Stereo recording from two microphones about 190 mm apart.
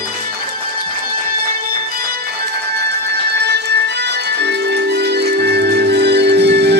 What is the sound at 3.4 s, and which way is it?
Music, 60° right (ahead or behind).